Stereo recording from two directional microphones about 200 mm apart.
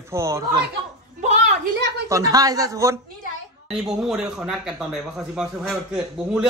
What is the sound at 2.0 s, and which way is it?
Speech, 15° right (ahead or behind).